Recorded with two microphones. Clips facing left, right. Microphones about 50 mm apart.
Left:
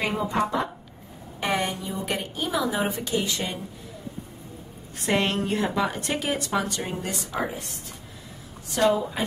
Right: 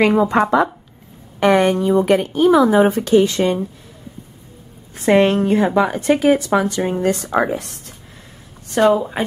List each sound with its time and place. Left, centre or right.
0.0 s speech: right
1.4 s speech: right
5.0 s speech: right
6.8 s speech: right
7.3 s speech: right
8.8 s a woman's voice: centre